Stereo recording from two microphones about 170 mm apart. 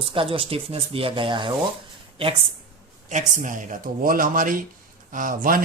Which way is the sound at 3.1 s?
45° right (ahead or behind).